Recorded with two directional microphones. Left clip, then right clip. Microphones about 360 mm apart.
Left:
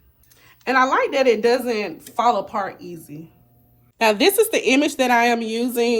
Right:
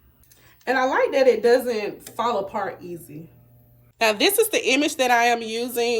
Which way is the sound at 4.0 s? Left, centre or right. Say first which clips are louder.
Left 3 dB; centre.